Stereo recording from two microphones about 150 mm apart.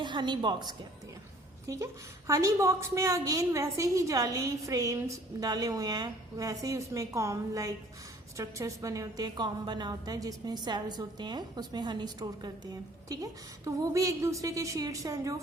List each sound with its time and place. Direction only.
0.0 s a woman's voice: 30° right (ahead or behind)